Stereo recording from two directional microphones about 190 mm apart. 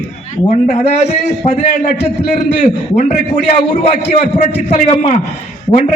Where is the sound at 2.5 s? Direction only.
40° left (ahead or behind).